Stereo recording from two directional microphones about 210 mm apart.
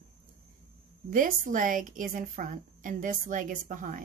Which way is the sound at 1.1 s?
40° right (ahead or behind).